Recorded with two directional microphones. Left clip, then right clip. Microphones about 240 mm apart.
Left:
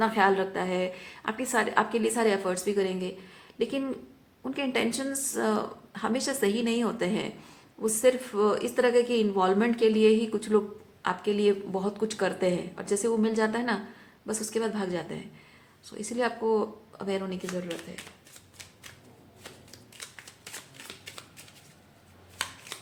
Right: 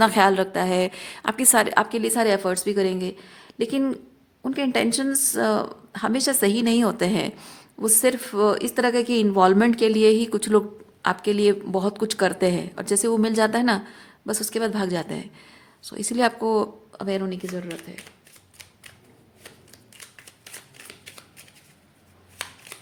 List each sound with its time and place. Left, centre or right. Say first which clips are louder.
0.0 s speech: right 6 dB; right
20.4 s shuffling cards: right 1 dB; centre